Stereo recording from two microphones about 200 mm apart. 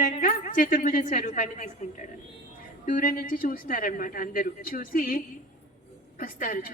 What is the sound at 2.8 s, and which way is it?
A woman's voice, 45° left (ahead or behind).